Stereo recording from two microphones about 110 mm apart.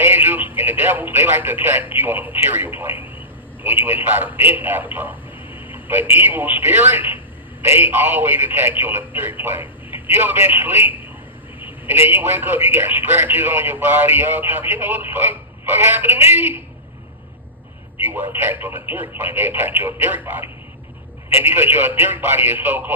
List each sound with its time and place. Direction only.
0.0 s radio: 20° right (ahead or behind)
0.5 s a man's voice: 20° right (ahead or behind)
5.5 s a sound: 55° left (ahead or behind)
6.1 s a man's voice: 15° right (ahead or behind)
18.0 s a man's voice: 20° right (ahead or behind)